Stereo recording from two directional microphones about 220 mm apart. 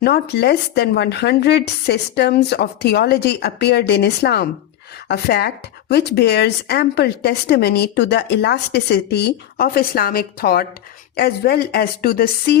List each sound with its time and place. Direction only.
0.0 s speech: 45° left (ahead or behind)